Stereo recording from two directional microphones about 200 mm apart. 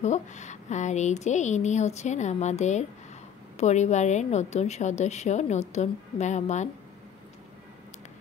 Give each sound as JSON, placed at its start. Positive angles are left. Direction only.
{"t": 0.0, "sound": "a woman's voice", "side_deg": 35}